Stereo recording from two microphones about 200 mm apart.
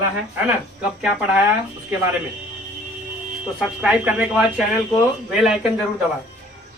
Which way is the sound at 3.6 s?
5° right (ahead or behind).